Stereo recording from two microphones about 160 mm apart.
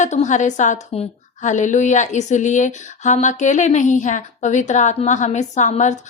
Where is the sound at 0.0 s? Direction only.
50° left (ahead or behind).